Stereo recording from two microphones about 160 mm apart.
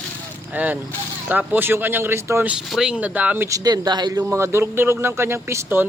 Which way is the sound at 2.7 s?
5° right (ahead or behind).